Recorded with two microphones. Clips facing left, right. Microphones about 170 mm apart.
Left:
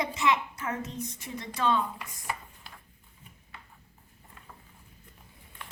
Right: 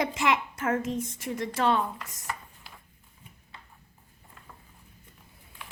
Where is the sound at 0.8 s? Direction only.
90° right.